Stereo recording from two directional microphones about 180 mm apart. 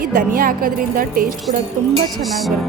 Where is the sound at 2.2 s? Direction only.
Centre (ahead or behind).